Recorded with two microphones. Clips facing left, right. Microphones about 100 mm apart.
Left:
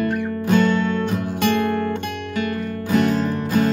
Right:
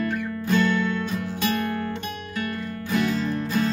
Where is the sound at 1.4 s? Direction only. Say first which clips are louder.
Left 6 dB; 65° left (ahead or behind).